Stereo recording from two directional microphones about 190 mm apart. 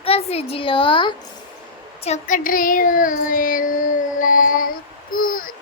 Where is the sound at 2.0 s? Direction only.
40° left (ahead or behind).